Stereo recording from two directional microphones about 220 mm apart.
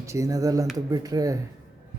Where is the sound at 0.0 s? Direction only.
15° right (ahead or behind).